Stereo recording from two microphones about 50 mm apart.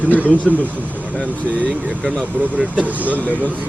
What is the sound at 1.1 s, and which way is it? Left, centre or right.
Speech, left.